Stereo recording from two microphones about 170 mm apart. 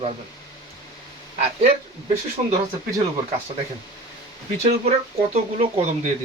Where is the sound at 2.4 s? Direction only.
30° right (ahead or behind).